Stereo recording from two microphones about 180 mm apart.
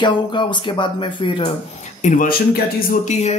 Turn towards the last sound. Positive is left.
turn(degrees=50)  # may be behind; listen again after turning